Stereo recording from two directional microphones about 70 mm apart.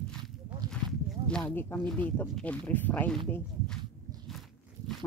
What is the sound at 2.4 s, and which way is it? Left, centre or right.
Speech, centre.